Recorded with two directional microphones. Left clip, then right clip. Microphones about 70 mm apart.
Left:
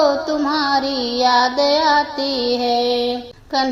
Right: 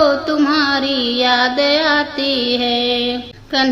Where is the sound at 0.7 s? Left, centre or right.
Left.